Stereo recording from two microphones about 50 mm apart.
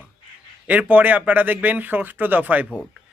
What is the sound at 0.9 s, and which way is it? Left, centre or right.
Speech, right.